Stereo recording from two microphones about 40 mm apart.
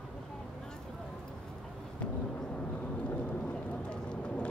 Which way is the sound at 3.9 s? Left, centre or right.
Left.